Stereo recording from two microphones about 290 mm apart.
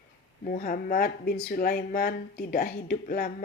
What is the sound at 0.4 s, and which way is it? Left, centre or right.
Speech, left.